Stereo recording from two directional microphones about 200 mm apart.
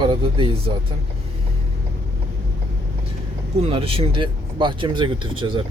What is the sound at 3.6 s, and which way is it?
Speech, 25° right (ahead or behind).